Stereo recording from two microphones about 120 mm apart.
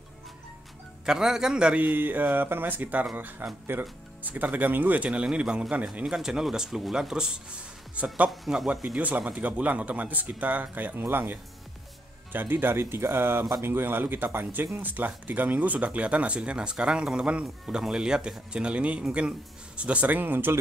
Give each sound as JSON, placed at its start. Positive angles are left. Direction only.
{"t": 1.0, "sound": "speech", "side_deg": -5}